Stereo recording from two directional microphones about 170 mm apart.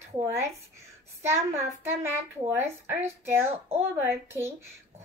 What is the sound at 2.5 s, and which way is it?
A woman's voice, 15° right (ahead or behind).